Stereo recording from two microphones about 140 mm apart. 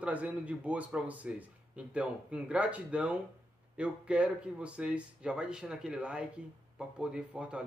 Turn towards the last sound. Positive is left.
turn(degrees=-10)  # may be behind; listen again after turning